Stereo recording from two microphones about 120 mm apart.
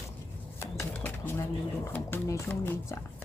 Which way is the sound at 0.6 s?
15° left (ahead or behind).